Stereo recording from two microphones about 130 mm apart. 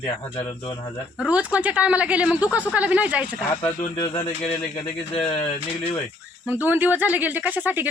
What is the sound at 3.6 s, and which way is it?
Speech, 40° left (ahead or behind).